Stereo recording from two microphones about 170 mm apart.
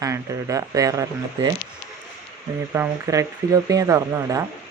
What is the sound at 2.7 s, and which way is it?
Speech, 15° right (ahead or behind).